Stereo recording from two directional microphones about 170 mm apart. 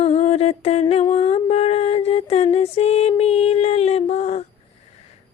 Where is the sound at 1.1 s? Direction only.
35° left (ahead or behind).